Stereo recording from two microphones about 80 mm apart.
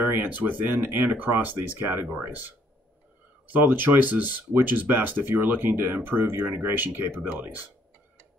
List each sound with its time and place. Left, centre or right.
0.4 s speech: right
3.5 s speech: right